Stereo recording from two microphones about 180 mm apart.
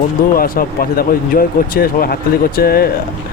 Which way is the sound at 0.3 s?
55° left (ahead or behind).